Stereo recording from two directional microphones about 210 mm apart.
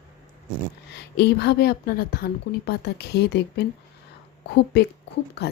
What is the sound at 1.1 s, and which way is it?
A woman's voice, 50° left (ahead or behind).